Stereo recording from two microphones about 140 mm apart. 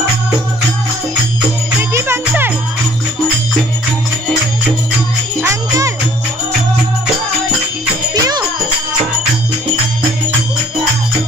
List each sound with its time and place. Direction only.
1.8 s music: 15° right (ahead or behind)
5.4 s music: 20° right (ahead or behind)
8.1 s music: 30° right (ahead or behind)